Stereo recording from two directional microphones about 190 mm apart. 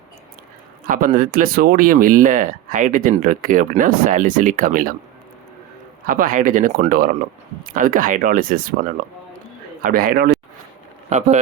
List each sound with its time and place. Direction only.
0.9 s speech: 45° right (ahead or behind)
6.1 s speech: 45° right (ahead or behind)
7.6 s speech: 45° right (ahead or behind)
11.1 s speech: 35° right (ahead or behind)